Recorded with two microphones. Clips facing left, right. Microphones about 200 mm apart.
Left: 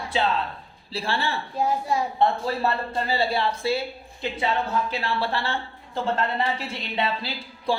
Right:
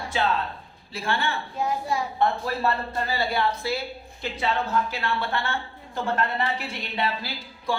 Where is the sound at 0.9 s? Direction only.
30° left (ahead or behind).